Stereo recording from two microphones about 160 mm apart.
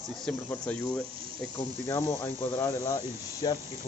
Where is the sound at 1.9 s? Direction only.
15° left (ahead or behind).